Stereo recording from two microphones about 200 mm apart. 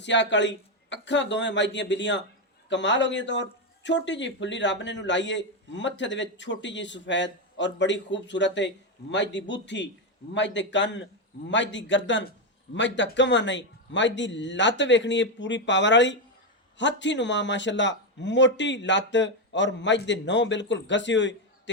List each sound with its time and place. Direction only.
0.0 s a man's voice: 65° left (ahead or behind)